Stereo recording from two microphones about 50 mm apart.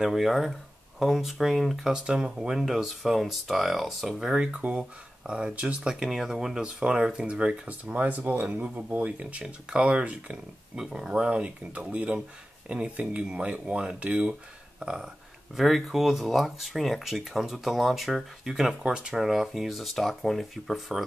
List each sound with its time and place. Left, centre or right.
0.0 s speech: centre
2.0 s speech: centre
4.2 s speech: centre
4.5 s speech: right
6.6 s speech: right
7.8 s speech: right
14.8 s speech: centre